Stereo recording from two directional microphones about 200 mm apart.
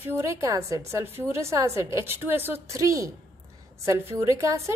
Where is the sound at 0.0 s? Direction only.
15° right (ahead or behind).